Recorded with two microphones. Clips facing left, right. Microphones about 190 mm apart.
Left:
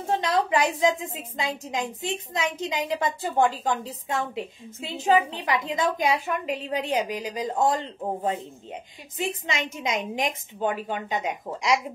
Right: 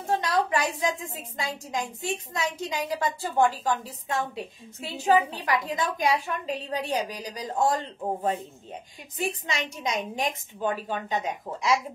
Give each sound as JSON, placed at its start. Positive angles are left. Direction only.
{"t": 0.1, "sound": "a woman's voice", "side_deg": 20}